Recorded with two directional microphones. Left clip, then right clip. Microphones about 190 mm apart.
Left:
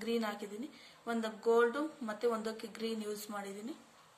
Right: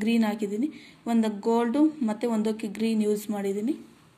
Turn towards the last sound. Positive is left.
turn(degrees=-10)  # may be behind; listen again after turning